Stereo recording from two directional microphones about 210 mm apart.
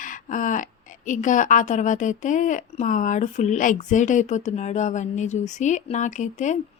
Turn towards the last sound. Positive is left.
turn(degrees=35)  # may be behind; listen again after turning